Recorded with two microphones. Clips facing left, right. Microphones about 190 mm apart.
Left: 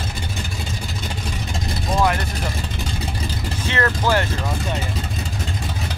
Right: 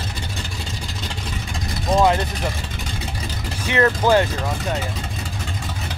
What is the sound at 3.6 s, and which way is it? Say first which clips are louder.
Speech: right 4 dB; 20° right (ahead or behind).